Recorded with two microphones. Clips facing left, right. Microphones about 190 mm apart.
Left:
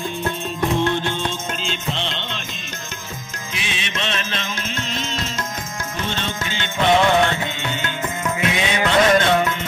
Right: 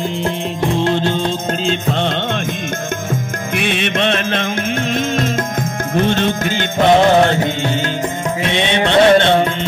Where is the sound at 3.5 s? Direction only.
60° right (ahead or behind).